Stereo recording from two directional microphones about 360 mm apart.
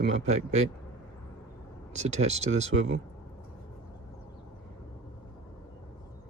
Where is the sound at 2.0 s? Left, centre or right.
Centre.